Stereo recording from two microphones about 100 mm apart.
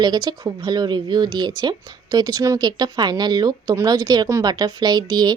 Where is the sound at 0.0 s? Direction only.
45° right (ahead or behind).